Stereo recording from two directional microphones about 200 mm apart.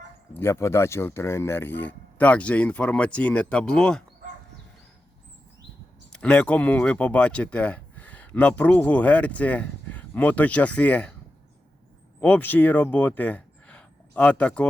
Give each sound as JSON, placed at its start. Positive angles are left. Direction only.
{"t": 0.3, "sound": "speech", "side_deg": 15}
{"t": 6.1, "sound": "speech", "side_deg": 5}
{"t": 12.2, "sound": "speech", "side_deg": 10}